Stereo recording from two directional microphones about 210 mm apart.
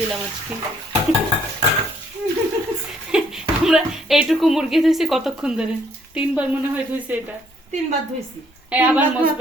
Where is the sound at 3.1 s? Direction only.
5° right (ahead or behind).